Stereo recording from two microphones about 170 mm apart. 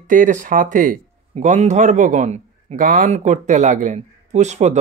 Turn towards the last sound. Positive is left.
turn(degrees=-40)  # may be behind; listen again after turning